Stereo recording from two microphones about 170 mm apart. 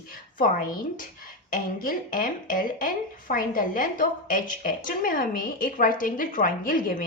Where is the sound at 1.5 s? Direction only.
55° left (ahead or behind).